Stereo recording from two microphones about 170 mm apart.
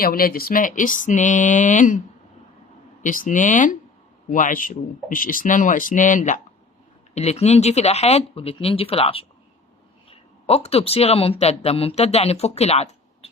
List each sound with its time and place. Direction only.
0.0 s speech: 60° left (ahead or behind)
3.0 s speech: 50° left (ahead or behind)